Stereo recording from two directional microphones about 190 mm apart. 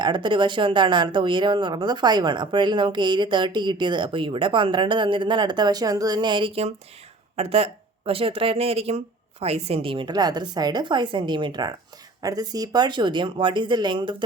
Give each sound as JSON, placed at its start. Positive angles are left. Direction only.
{"t": 0.0, "sound": "speech", "side_deg": -25}